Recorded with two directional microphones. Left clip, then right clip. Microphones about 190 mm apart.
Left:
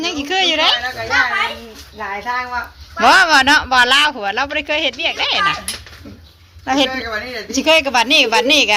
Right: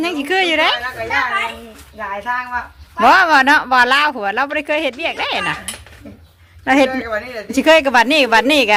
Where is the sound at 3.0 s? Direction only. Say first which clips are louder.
Even; 25° right (ahead or behind).